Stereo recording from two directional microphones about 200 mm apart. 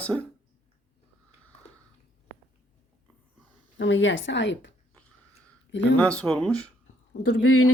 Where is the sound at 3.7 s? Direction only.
70° left (ahead or behind).